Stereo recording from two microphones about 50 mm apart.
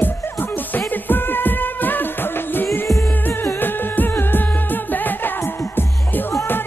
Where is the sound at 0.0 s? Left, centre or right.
Left.